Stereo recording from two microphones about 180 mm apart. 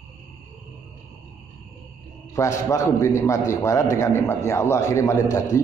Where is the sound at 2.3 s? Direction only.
15° left (ahead or behind).